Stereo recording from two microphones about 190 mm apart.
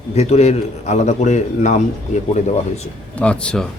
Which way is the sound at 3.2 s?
5° left (ahead or behind).